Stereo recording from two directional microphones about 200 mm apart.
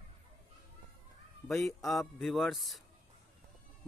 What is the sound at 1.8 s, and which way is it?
Speech, centre (ahead or behind).